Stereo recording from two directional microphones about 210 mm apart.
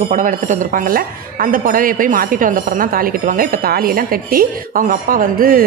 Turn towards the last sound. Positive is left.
turn(degrees=-40)  # may be behind; listen again after turning